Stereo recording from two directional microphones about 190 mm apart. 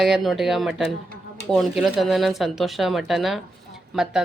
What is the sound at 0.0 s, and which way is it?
Speech, centre (ahead or behind).